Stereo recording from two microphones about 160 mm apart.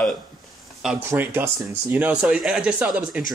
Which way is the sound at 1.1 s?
15° right (ahead or behind).